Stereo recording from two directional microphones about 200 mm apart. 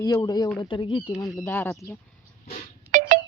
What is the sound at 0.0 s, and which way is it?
Speech, 20° left (ahead or behind).